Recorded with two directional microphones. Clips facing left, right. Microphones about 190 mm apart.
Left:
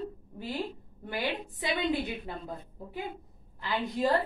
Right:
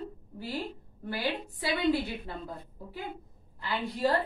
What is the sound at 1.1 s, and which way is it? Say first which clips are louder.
Speech: even; 20° left (ahead or behind).